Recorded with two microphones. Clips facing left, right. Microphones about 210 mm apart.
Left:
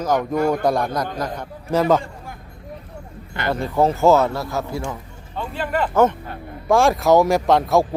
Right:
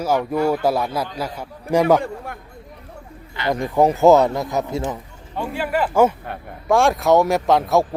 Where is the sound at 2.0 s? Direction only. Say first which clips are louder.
Right 5 dB; 65° right (ahead or behind).